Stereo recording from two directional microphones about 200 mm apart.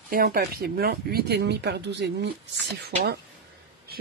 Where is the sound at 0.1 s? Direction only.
45° right (ahead or behind).